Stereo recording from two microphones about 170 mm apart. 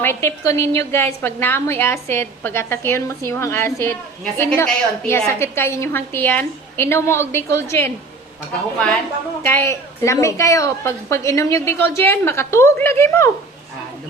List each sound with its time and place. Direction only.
0.0 s a woman's voice: 15° left (ahead or behind)
9.4 s a woman's voice: 15° left (ahead or behind)